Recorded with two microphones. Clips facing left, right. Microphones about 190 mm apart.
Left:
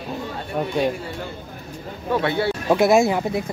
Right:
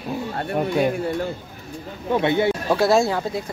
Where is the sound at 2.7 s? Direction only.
20° left (ahead or behind).